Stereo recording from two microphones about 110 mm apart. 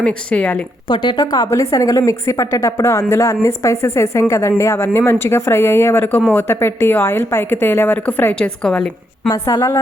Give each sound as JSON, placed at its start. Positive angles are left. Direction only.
{"t": 0.0, "sound": "a woman's voice", "side_deg": 10}
{"t": 0.9, "sound": "a woman's voice", "side_deg": 45}
{"t": 8.6, "sound": "a woman's voice", "side_deg": 5}
{"t": 9.3, "sound": "a woman's voice", "side_deg": 30}